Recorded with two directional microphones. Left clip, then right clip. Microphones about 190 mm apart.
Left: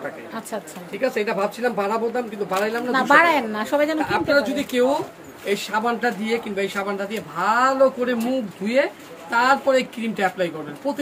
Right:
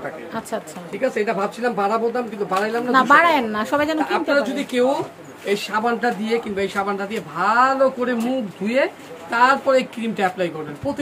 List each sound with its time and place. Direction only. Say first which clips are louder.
0.3 s speech: right 3 dB; 10° right (ahead or behind)
2.9 s speech: right 2 dB; 15° right (ahead or behind)